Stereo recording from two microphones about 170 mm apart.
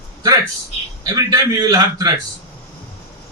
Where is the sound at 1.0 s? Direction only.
20° right (ahead or behind).